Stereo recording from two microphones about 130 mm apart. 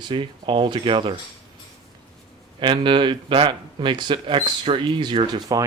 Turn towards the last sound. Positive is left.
turn(degrees=-35)  # may be behind; listen again after turning